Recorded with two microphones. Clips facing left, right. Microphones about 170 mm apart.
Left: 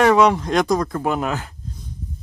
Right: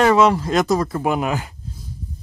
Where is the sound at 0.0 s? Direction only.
Centre (ahead or behind).